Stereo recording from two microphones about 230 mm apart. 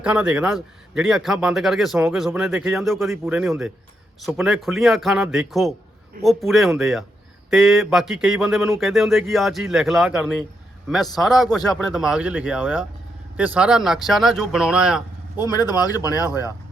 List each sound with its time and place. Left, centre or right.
0.0 s speech: centre
15.4 s speech: centre